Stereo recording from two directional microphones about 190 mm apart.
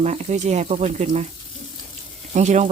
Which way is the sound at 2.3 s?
35° right (ahead or behind).